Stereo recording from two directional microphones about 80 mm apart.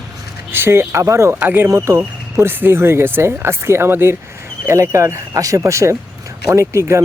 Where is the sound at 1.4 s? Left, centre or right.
Right.